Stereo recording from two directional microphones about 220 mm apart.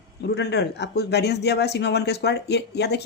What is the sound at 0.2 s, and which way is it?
Speech, 50° left (ahead or behind).